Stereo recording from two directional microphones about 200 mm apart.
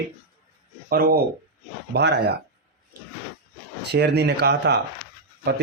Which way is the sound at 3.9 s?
55° right (ahead or behind).